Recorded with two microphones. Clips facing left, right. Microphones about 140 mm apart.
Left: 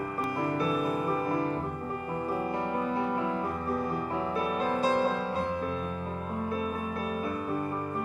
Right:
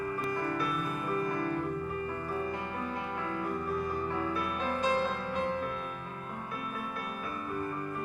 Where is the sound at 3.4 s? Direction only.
30° left (ahead or behind).